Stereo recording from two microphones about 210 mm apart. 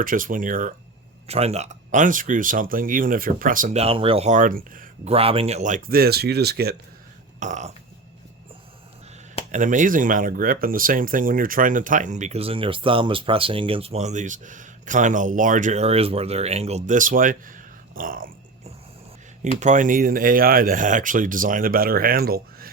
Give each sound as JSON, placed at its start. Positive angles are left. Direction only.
{"t": 0.0, "sound": "speech", "side_deg": -40}
{"t": 5.1, "sound": "speech", "side_deg": -25}
{"t": 7.3, "sound": "burping", "side_deg": -35}
{"t": 9.5, "sound": "speech", "side_deg": -35}
{"t": 19.5, "sound": "speech", "side_deg": -35}